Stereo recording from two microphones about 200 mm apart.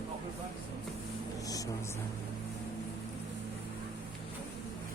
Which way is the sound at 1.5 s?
15° left (ahead or behind).